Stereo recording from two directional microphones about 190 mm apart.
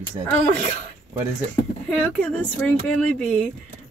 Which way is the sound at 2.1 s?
5° left (ahead or behind).